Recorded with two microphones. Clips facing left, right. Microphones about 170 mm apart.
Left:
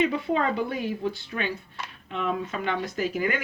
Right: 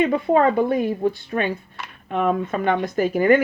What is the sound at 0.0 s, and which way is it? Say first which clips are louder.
Speech: right 7 dB; 50° right (ahead or behind).